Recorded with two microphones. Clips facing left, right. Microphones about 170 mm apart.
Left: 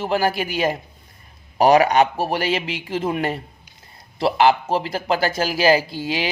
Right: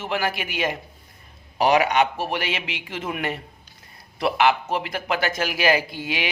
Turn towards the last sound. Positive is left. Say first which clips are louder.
# left 3 dB
turn(degrees=30)  # may be behind; listen again after turning